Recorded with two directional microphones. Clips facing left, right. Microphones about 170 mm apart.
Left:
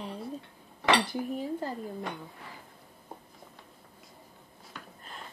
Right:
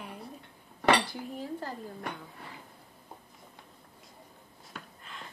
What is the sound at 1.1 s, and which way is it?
Speech, 15° left (ahead or behind).